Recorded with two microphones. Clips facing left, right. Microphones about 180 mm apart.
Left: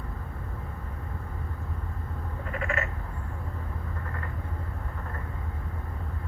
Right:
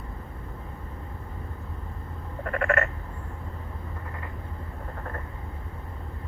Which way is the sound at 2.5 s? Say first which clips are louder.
Right 7 dB; 60° right (ahead or behind).